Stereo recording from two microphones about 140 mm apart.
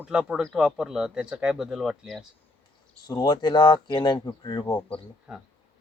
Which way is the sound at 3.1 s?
30° left (ahead or behind).